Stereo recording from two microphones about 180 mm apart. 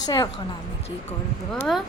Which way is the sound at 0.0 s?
20° left (ahead or behind).